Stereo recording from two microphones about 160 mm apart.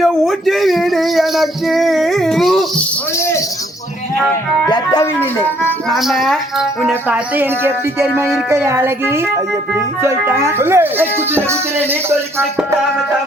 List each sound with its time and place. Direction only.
0.0 s speech: centre (ahead or behind)
4.6 s speech: 25° left (ahead or behind)
5.9 s speech: centre (ahead or behind)